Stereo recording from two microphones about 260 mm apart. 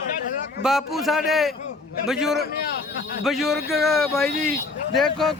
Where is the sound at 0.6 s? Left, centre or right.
Centre.